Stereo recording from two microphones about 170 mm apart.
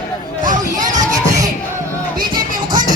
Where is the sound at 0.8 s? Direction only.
20° right (ahead or behind).